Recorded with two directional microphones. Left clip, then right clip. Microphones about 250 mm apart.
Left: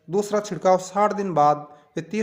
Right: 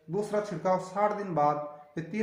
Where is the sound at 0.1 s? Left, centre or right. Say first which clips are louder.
Left 7 dB; left.